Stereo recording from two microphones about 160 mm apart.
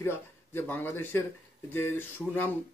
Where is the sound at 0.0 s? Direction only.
15° left (ahead or behind).